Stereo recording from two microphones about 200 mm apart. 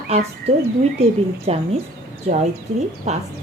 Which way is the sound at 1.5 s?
30° right (ahead or behind).